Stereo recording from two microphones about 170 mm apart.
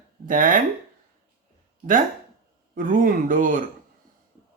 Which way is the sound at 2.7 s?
55° right (ahead or behind).